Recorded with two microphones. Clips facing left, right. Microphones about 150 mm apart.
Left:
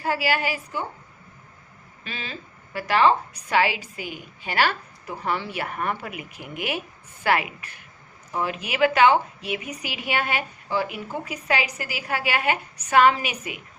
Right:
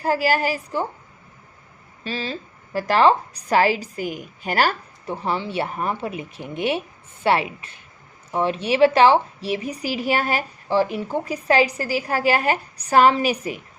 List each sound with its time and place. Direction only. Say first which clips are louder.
0.0 s a woman's voice: right 4 dB; 40° right (ahead or behind)
2.0 s a woman's voice: right 8 dB; 35° right (ahead or behind)
5.0 s a woman's voice: right 3 dB; 25° right (ahead or behind)